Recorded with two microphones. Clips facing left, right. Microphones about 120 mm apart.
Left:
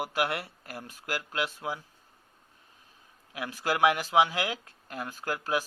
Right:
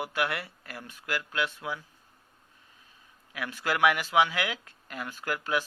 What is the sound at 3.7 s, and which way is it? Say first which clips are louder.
Speech: left 1 dB; 25° left (ahead or behind).